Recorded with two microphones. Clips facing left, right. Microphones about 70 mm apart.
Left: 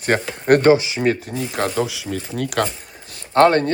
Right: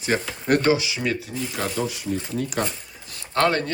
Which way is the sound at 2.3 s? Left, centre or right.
Left.